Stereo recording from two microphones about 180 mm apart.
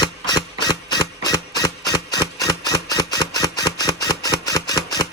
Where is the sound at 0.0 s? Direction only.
20° left (ahead or behind).